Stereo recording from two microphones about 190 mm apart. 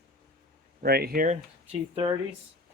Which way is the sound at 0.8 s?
55° right (ahead or behind).